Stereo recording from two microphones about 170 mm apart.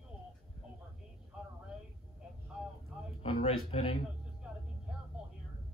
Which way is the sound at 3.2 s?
35° left (ahead or behind).